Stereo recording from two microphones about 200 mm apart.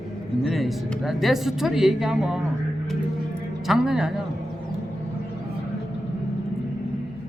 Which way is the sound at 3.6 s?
Centre (ahead or behind).